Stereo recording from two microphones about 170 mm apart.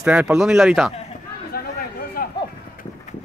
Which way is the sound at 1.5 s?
65° left (ahead or behind).